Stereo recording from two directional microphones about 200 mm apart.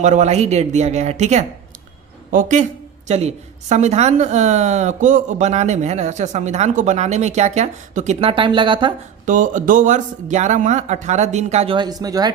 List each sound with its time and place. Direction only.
0.0 s a woman's voice: 35° right (ahead or behind)
9.2 s a woman's voice: 40° right (ahead or behind); by 12.3 s 20° right (ahead or behind)